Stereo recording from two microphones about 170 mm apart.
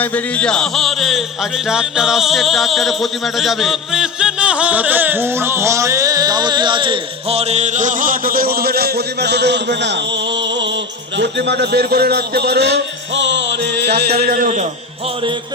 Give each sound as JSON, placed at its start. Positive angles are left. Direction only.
{"t": 0.0, "sound": "music", "side_deg": 10}
{"t": 11.2, "sound": "a man's voice", "side_deg": -85}
{"t": 14.2, "sound": "a man's voice", "side_deg": -55}